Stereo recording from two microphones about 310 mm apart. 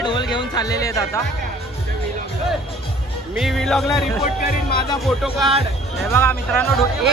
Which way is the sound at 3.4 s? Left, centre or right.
Centre.